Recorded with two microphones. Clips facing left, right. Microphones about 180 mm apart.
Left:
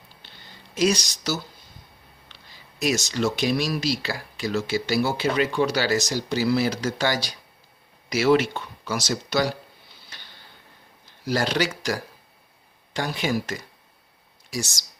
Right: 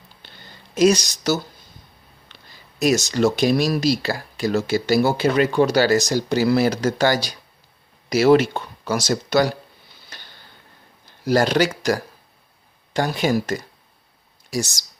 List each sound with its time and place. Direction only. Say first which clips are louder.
0.8 s speech: right 6 dB; 45° right (ahead or behind)
10.1 s tick-tock: right 4 dB; 40° right (ahead or behind)
11.3 s speech: right 6 dB; 45° right (ahead or behind)